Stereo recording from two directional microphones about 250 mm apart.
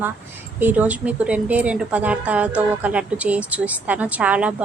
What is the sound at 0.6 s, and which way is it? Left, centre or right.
A woman's voice, centre.